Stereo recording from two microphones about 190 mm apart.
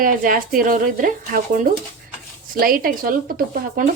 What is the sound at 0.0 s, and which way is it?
A woman's voice, 45° right (ahead or behind).